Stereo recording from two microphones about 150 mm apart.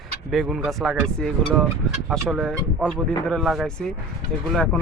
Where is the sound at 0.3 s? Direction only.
Centre (ahead or behind).